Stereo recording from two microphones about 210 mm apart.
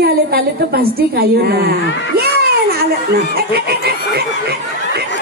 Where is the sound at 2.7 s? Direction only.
50° right (ahead or behind).